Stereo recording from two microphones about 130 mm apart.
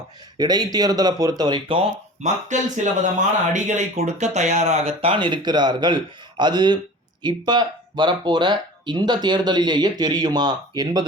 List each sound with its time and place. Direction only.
0.3 s speech: 30° right (ahead or behind)
2.2 s speech: 70° right (ahead or behind); by 11.0 s 30° right (ahead or behind)